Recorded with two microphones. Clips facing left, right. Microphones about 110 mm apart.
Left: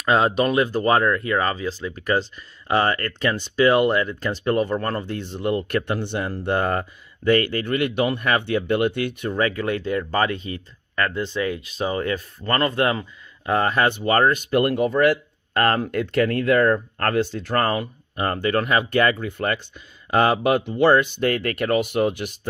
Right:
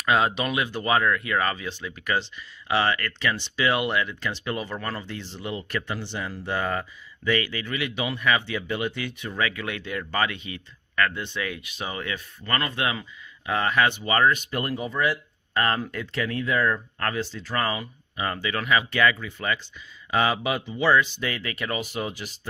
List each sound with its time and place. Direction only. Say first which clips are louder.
0.0 s speech: left 4 dB; 35° left (ahead or behind); by 9.3 s 55° left (ahead or behind)
9.4 s speech: left 6 dB; 40° left (ahead or behind); by 22.5 s 55° left (ahead or behind)